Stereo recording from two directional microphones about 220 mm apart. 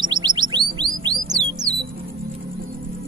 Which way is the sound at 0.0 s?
20° right (ahead or behind).